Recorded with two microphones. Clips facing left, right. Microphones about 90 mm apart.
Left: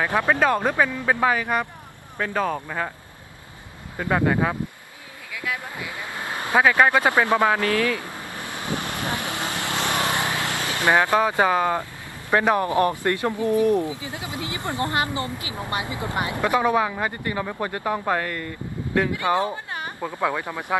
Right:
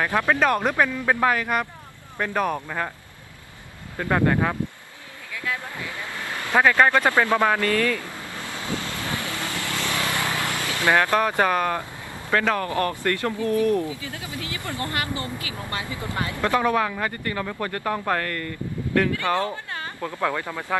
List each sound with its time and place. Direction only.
0.0 s speech: 15° left (ahead or behind)
4.0 s speech: 10° left (ahead or behind)
6.6 s vehicle: 10° left (ahead or behind)
12.3 s speech: 20° left (ahead or behind)